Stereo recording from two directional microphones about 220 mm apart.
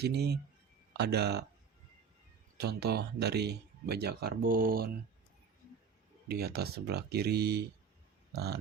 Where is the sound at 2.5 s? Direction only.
45° right (ahead or behind).